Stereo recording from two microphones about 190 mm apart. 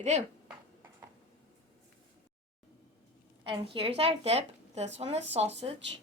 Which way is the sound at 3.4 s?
30° right (ahead or behind).